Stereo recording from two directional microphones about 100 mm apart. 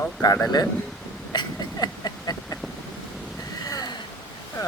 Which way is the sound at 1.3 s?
40° left (ahead or behind).